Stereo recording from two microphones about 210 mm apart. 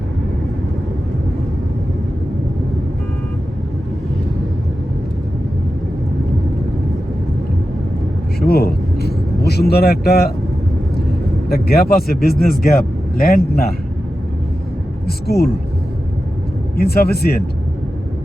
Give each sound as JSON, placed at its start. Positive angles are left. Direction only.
{"t": 8.4, "sound": "vehicle", "side_deg": 50}
{"t": 11.4, "sound": "speech", "side_deg": 45}
{"t": 15.0, "sound": "speech", "side_deg": 50}
{"t": 16.7, "sound": "speech", "side_deg": 45}